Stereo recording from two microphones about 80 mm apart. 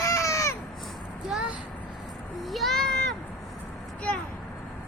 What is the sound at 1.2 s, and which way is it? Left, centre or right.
Speech, centre.